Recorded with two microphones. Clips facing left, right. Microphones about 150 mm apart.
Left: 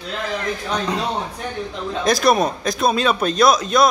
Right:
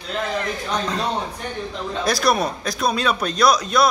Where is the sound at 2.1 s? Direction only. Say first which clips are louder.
Left 4 dB; 20° left (ahead or behind).